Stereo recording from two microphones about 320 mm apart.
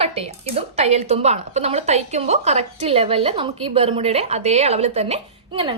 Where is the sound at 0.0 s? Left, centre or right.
Centre.